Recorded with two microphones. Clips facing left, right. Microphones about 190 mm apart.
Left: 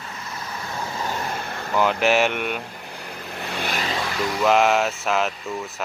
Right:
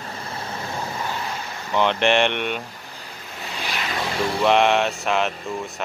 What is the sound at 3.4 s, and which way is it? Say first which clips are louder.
Vehicle: left 3 dB; 55° left (ahead or behind).